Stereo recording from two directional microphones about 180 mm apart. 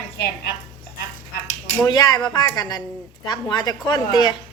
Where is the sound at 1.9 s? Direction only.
20° left (ahead or behind).